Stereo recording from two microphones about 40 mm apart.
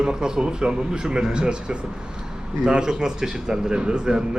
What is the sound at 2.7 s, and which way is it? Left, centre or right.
Speech, centre.